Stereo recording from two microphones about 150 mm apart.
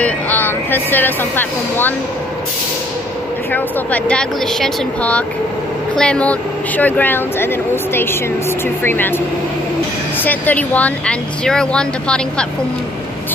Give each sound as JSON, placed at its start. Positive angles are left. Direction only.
{"t": 0.0, "sound": "speech", "side_deg": 10}
{"t": 3.5, "sound": "speech", "side_deg": 10}
{"t": 10.2, "sound": "speech", "side_deg": 10}